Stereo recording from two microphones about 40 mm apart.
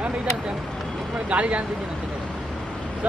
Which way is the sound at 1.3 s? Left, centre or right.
Right.